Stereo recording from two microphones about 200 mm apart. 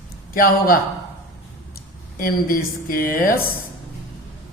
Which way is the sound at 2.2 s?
45° left (ahead or behind).